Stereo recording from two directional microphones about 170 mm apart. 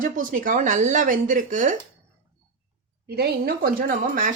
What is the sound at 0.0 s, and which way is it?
Speech, 50° right (ahead or behind).